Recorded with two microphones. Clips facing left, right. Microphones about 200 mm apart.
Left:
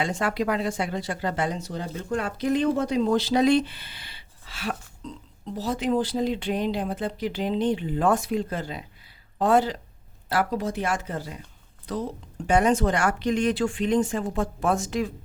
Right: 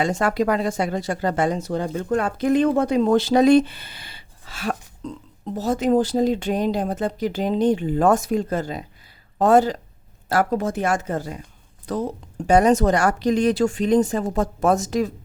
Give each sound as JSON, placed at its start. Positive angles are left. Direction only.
{"t": 0.0, "sound": "a woman's voice", "side_deg": -45}